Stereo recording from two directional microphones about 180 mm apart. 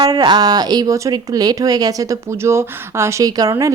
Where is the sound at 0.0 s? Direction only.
20° right (ahead or behind).